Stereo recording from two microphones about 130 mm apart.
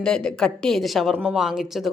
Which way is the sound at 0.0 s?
5° left (ahead or behind).